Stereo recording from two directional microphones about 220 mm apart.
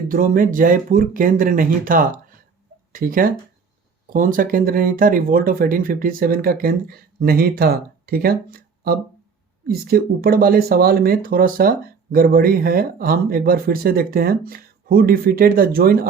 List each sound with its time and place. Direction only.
0.1 s speech: 40° right (ahead or behind)